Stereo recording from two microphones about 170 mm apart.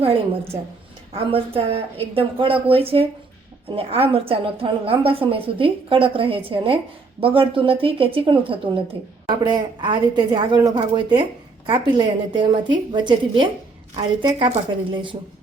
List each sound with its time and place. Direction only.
0.0 s a woman's voice: 35° right (ahead or behind)